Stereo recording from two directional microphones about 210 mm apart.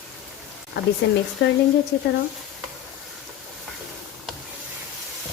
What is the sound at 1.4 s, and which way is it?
Speech, 55° left (ahead or behind).